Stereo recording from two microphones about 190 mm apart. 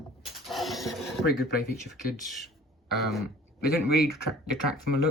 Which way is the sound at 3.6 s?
55° left (ahead or behind).